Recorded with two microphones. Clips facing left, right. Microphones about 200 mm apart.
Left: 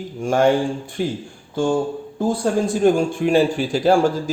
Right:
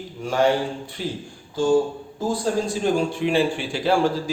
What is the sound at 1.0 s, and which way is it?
Speech, 55° left (ahead or behind).